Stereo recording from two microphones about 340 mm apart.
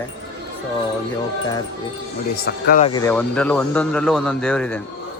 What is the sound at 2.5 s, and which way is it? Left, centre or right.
Speech, left.